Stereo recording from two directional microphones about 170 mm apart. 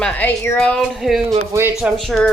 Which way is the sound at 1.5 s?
15° right (ahead or behind).